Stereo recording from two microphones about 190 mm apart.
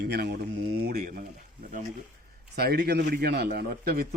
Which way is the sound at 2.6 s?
55° right (ahead or behind).